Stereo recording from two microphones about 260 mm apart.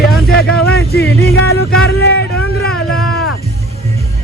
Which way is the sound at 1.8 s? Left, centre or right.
Left.